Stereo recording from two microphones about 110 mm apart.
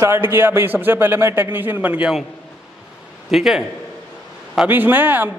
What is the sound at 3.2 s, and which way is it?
Speech, 5° right (ahead or behind).